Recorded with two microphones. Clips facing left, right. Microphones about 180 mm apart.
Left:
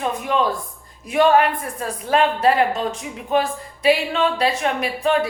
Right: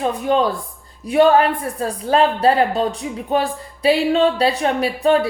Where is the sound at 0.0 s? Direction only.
35° right (ahead or behind).